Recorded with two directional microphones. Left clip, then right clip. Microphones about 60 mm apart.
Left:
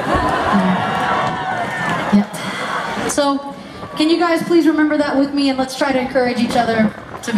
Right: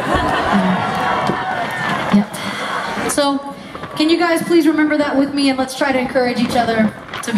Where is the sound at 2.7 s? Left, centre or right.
Right.